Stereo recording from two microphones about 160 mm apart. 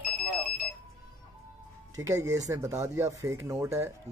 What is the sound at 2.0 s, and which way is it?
Speech, 20° right (ahead or behind).